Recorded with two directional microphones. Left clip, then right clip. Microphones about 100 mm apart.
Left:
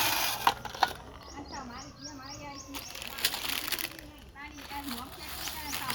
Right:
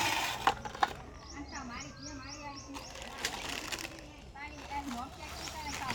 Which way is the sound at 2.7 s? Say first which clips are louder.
Left 4 dB; 75° left (ahead or behind).